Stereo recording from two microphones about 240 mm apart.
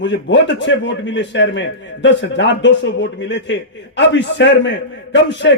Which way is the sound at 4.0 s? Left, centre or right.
Left.